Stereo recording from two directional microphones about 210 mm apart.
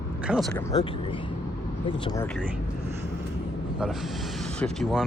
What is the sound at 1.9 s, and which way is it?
Speech, 20° left (ahead or behind).